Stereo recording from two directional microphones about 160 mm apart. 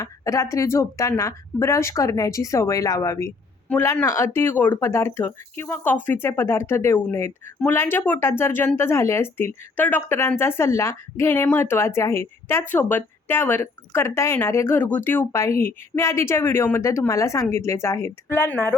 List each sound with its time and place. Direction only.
0.0 s speech: 20° left (ahead or behind)